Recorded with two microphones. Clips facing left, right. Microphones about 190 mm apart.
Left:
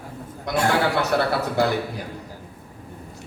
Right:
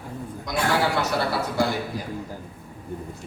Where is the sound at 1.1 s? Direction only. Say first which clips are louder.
Left 4 dB; 60° left (ahead or behind).